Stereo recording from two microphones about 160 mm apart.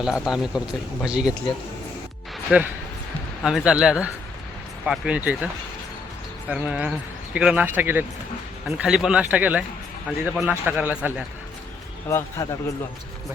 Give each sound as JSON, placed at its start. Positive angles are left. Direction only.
{"t": 0.0, "sound": "a man's voice", "side_deg": -5}
{"t": 2.5, "sound": "a man's voice", "side_deg": -5}
{"t": 6.5, "sound": "speech", "side_deg": -10}
{"t": 12.0, "sound": "a man's voice", "side_deg": 20}